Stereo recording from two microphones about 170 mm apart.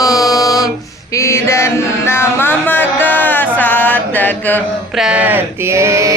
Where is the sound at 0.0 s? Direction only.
20° left (ahead or behind).